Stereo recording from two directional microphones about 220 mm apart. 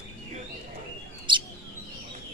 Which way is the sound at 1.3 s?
20° right (ahead or behind).